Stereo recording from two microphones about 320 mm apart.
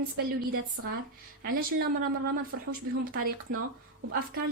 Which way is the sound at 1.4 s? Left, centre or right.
Right.